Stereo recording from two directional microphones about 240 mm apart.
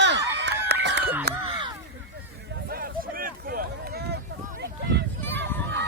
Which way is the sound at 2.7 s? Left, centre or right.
Right.